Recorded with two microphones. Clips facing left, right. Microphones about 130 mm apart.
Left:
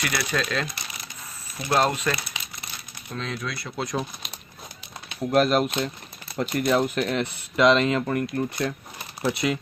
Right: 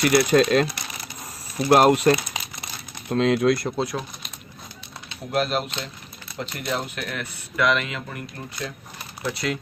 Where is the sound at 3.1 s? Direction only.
70° right (ahead or behind).